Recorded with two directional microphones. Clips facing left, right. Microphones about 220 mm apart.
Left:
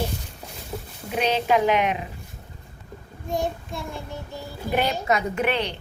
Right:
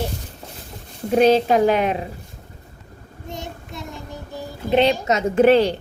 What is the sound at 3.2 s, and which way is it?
Child singing, 20° right (ahead or behind).